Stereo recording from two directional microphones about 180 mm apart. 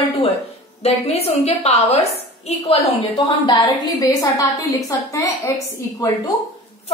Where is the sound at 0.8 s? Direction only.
35° left (ahead or behind); by 4.6 s 20° left (ahead or behind).